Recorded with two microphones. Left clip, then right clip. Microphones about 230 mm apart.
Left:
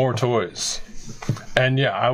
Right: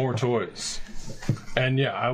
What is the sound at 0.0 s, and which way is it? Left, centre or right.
Speech, left.